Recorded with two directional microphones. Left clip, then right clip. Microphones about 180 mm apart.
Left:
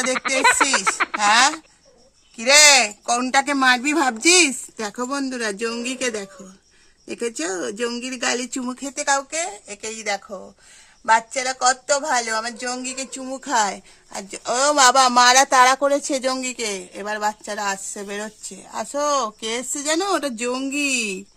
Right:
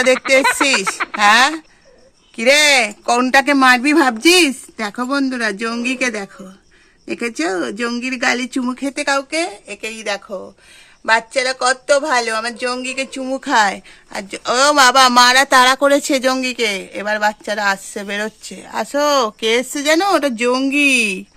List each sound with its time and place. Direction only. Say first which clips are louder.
0.1 s speech: right 3 dB; centre (ahead or behind)
1.2 s speech: right 5 dB; 20° right (ahead or behind)